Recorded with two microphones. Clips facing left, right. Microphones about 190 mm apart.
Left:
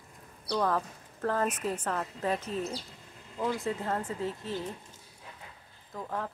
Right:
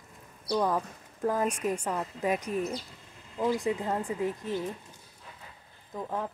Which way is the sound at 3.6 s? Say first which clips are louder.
Right 3 dB; 15° right (ahead or behind).